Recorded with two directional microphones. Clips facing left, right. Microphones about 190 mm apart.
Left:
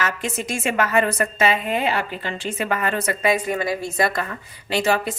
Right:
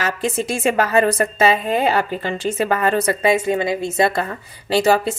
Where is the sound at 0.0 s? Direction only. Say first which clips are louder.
Right 4 dB; 35° right (ahead or behind).